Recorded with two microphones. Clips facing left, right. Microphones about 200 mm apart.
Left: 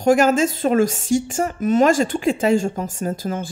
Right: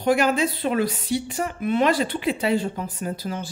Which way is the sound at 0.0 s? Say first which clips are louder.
Left 5 dB; 45° left (ahead or behind).